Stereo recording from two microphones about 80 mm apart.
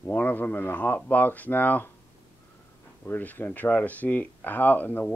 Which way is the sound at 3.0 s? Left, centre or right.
Left.